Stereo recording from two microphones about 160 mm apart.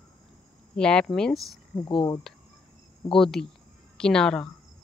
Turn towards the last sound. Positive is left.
turn(degrees=5)  # may be behind; listen again after turning